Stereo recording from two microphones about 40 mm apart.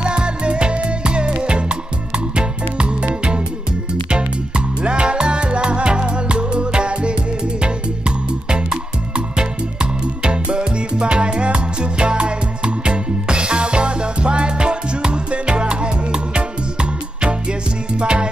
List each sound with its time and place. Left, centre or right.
0.0 s music: right